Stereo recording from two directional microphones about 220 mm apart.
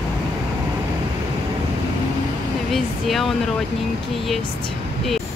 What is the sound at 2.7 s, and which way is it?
Speech, centre (ahead or behind).